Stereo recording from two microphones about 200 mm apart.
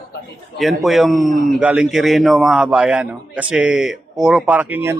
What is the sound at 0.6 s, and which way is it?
A man's voice, centre (ahead or behind).